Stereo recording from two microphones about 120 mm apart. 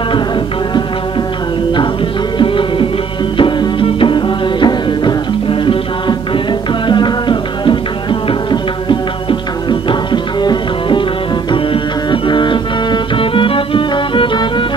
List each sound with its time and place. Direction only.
2.3 s music: 45° left (ahead or behind)